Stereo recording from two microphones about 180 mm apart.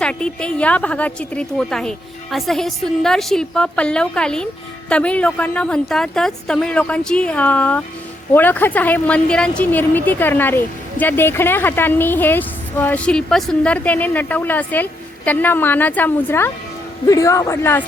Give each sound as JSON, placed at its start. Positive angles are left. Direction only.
{"t": 0.0, "sound": "a woman's voice", "side_deg": 5}